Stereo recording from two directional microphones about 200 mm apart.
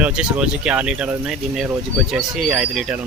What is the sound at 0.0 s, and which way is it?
Speech, 5° right (ahead or behind).